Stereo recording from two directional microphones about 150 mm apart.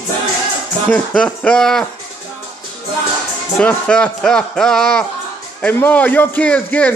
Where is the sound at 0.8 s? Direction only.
10° left (ahead or behind).